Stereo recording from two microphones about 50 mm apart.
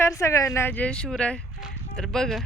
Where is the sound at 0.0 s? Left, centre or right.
Left.